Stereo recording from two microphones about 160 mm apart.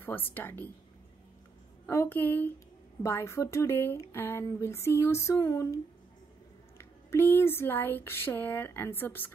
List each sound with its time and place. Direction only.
0.0 s speech: 15° left (ahead or behind)
1.9 s speech: 15° left (ahead or behind)
6.8 s speech: 15° left (ahead or behind)